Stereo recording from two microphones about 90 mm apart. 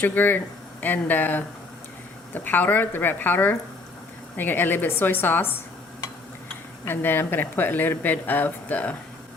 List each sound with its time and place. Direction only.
0.0 s speech: 20° left (ahead or behind)
6.8 s speech: 25° left (ahead or behind)